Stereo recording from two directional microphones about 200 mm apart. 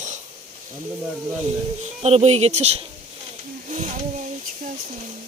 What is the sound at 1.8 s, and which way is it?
Speech, 30° right (ahead or behind).